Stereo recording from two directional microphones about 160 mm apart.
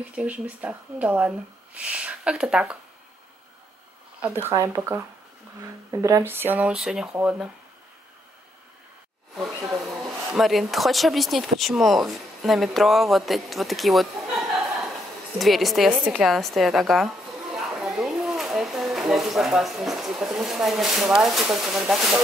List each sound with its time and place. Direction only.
0.1 s speech: 10° right (ahead or behind)
4.2 s speech: 15° right (ahead or behind)
10.3 s speech: centre (ahead or behind)